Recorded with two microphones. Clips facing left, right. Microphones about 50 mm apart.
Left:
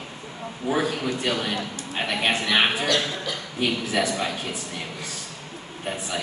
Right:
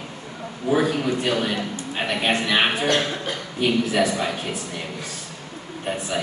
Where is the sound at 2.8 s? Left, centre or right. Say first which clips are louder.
Right 2 dB; right.